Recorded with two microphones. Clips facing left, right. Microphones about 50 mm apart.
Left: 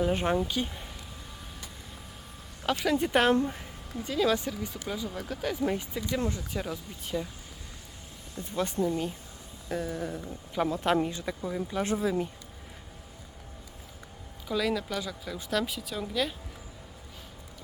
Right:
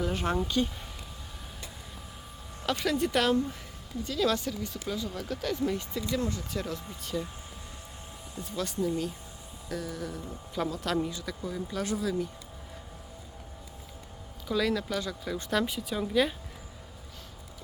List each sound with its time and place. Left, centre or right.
0.0 s speech: centre
0.3 s speech: centre
2.6 s speech: centre
2.9 s speech: left
4.0 s speech: centre
6.1 s speech: left
6.5 s speech: centre
8.4 s speech: left
14.4 s speech: centre